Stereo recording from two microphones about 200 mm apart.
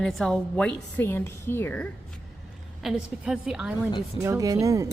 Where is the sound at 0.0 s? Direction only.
Centre (ahead or behind).